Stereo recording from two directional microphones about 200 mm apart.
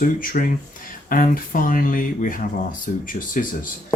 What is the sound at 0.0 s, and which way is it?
Speech, 45° left (ahead or behind).